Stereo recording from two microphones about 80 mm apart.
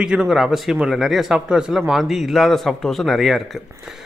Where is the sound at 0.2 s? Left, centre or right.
Centre.